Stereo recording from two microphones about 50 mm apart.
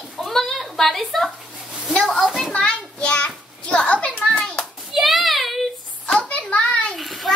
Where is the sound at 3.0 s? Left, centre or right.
Left.